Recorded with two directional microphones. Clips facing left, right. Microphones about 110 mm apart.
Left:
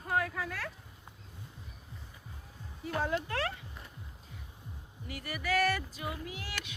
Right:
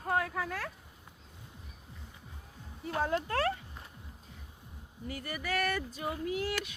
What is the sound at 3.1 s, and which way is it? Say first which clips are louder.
Speech: right 3 dB; 40° right (ahead or behind).